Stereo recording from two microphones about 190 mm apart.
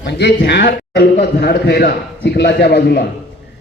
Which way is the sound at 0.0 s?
60° left (ahead or behind).